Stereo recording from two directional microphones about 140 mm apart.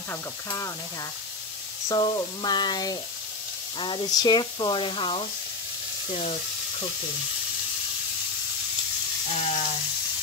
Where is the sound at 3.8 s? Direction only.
35° left (ahead or behind).